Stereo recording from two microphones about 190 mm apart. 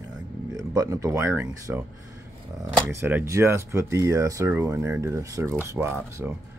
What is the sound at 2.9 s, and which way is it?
Speech, 10° right (ahead or behind).